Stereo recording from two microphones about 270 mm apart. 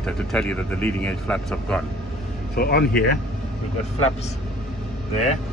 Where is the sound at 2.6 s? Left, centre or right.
Left.